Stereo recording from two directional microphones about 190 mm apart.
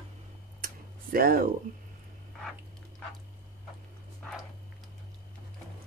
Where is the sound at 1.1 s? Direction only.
50° right (ahead or behind).